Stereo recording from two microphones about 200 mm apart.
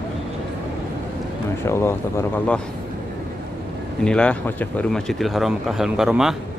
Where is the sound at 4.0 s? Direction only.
5° left (ahead or behind).